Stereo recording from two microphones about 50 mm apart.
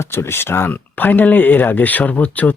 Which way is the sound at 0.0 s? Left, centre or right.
Left.